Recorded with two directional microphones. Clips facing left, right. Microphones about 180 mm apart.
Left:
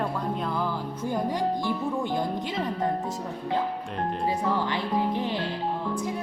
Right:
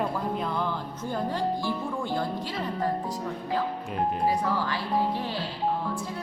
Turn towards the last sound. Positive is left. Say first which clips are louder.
# left 1 dB
turn(degrees=20)  # may be behind; listen again after turning